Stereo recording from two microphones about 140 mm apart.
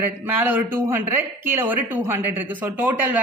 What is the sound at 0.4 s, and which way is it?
A woman's voice, 15° right (ahead or behind).